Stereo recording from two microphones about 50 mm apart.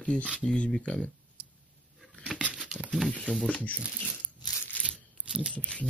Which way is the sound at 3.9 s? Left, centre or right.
Centre.